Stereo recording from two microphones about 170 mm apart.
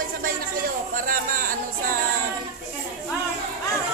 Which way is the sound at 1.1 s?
55° right (ahead or behind).